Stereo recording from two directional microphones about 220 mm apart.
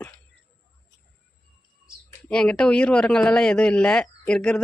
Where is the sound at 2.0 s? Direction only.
5° left (ahead or behind).